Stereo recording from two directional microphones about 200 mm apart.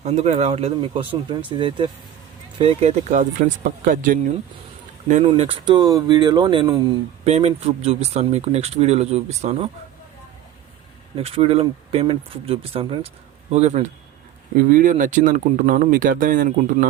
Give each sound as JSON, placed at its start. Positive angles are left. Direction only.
{"t": 0.0, "sound": "speech", "side_deg": -35}
{"t": 11.2, "sound": "speech", "side_deg": -30}